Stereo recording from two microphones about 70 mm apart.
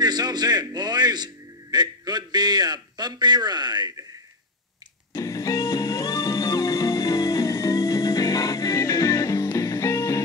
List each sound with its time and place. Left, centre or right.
0.0 s a man's voice: right
5.1 s music: left
9.6 s music: left